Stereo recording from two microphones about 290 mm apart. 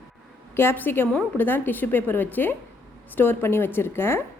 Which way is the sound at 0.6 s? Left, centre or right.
Centre.